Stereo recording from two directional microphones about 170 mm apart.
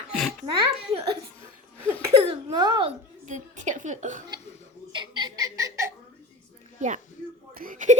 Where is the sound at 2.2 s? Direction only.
30° right (ahead or behind).